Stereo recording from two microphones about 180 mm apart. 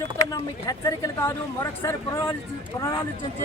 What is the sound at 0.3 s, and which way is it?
Speech, 20° left (ahead or behind).